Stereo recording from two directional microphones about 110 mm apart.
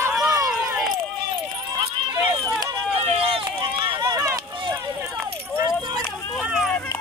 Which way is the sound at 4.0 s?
30° right (ahead or behind).